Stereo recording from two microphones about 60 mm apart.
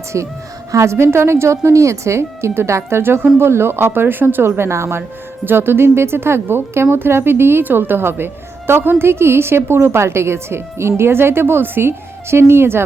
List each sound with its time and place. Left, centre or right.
0.1 s a woman's voice: right